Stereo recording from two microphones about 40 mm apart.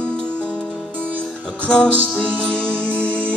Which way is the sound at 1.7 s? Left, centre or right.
Left.